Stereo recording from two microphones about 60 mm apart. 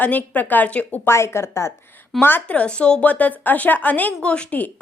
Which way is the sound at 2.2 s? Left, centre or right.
Left.